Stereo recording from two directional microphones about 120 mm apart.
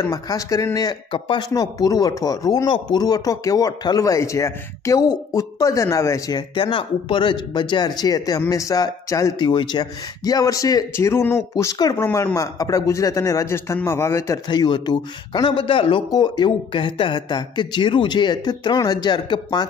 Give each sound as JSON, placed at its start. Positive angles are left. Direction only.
{"t": 0.0, "sound": "speech", "side_deg": 30}
{"t": 1.1, "sound": "speech", "side_deg": 50}
{"t": 1.5, "sound": "speech", "side_deg": 30}
{"t": 6.5, "sound": "speech", "side_deg": 45}
{"t": 9.4, "sound": "speech", "side_deg": 40}
{"t": 14.5, "sound": "speech", "side_deg": 40}